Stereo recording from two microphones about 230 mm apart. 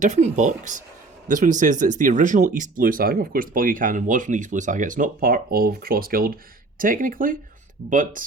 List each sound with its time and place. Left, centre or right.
0.0 s speech: right